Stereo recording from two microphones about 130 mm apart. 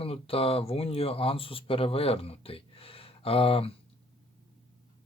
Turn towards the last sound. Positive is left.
turn(degrees=45)  # may be behind; listen again after turning